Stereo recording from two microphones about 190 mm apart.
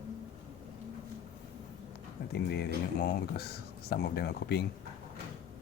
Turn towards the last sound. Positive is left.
turn(degrees=60)  # may be behind; listen again after turning